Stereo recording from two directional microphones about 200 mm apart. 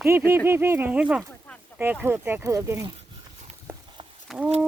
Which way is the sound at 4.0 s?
25° right (ahead or behind).